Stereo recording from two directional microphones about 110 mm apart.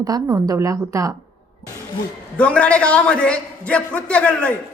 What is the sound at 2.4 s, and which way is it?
A man's voice, 10° left (ahead or behind).